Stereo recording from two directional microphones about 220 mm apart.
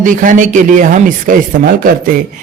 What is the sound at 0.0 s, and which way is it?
Speech, 35° right (ahead or behind).